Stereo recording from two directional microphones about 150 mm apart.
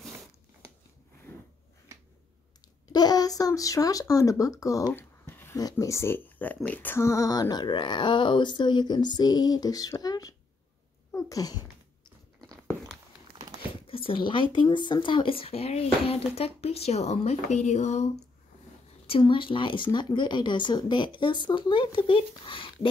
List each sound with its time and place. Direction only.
1.3 s a sound: 15° left (ahead or behind)
2.9 s speech: 25° left (ahead or behind)
5.6 s speech: 25° left (ahead or behind)
11.1 s a sound: 20° left (ahead or behind)
13.6 s speech: 35° left (ahead or behind)
19.0 s speech: 35° left (ahead or behind)